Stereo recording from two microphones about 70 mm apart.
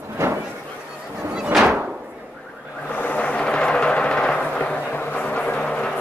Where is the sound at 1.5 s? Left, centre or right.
Centre.